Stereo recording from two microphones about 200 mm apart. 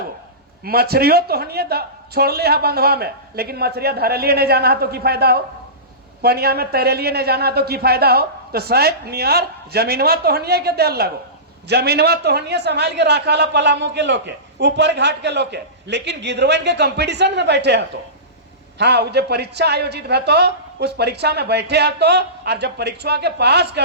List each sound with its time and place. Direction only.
0.6 s a man's voice: 50° right (ahead or behind)